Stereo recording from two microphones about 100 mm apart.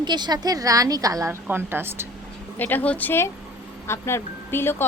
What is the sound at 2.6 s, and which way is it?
Speech, 20° left (ahead or behind).